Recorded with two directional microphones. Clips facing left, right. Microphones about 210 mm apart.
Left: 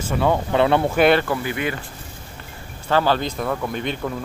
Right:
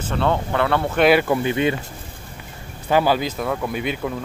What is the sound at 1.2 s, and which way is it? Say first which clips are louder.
Speech: right 5 dB; 20° right (ahead or behind).